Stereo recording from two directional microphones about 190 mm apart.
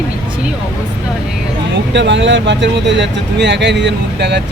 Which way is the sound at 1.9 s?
70° right (ahead or behind).